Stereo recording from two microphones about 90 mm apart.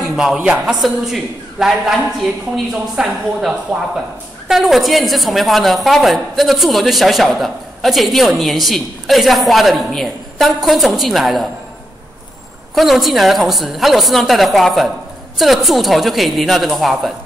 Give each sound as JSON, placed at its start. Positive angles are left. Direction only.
{"t": 0.0, "sound": "a woman's voice", "side_deg": -5}
{"t": 12.7, "sound": "a woman's voice", "side_deg": 0}